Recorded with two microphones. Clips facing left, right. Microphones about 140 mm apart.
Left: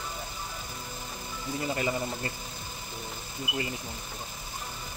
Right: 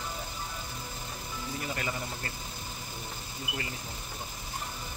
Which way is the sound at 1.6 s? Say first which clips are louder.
Left 7 dB; 25° left (ahead or behind).